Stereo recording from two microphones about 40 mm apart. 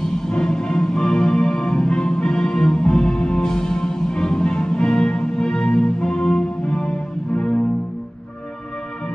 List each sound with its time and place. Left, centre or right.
0.3 s music: centre